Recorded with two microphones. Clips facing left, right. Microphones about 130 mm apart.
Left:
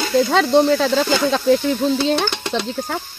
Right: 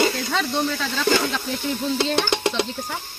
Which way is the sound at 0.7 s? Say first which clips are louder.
Left 7 dB; 55° left (ahead or behind).